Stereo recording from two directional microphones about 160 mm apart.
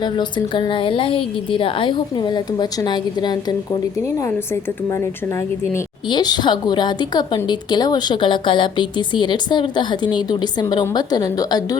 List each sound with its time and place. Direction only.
0.0 s a woman's voice: 30° left (ahead or behind)
6.1 s a woman's voice: 25° left (ahead or behind)